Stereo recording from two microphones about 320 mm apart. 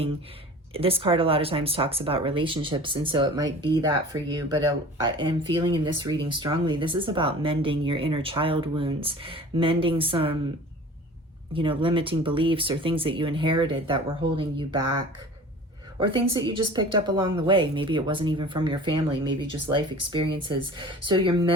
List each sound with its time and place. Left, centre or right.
0.7 s speech: centre
11.5 s speech: centre
16.3 s speech: centre